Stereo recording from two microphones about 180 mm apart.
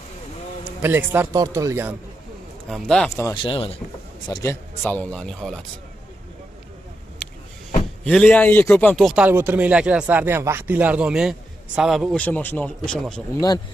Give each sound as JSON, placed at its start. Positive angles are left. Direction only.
{"t": 0.8, "sound": "speech", "side_deg": -10}
{"t": 2.7, "sound": "speech", "side_deg": 5}
{"t": 3.4, "sound": "a man's voice", "side_deg": 30}
{"t": 4.3, "sound": "speech", "side_deg": 15}
{"t": 8.0, "sound": "speech", "side_deg": 5}